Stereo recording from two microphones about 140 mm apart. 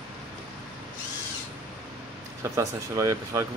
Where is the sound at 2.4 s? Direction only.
20° right (ahead or behind).